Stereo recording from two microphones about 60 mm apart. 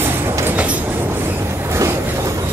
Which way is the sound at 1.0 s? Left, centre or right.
Right.